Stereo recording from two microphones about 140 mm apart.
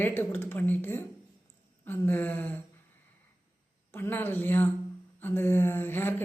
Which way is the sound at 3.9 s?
15° left (ahead or behind).